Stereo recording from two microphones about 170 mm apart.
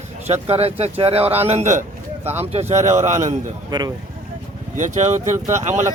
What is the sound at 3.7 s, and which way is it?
Speech, 25° right (ahead or behind).